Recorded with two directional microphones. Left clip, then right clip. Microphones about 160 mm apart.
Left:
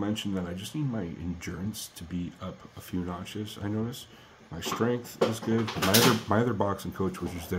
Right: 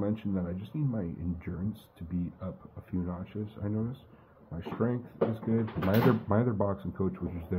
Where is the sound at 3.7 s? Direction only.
10° left (ahead or behind).